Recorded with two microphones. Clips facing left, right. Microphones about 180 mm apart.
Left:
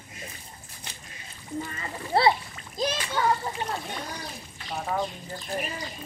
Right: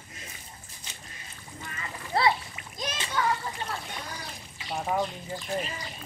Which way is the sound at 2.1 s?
30° left (ahead or behind).